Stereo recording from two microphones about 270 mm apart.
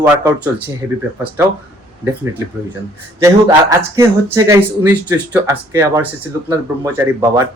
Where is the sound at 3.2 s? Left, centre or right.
Centre.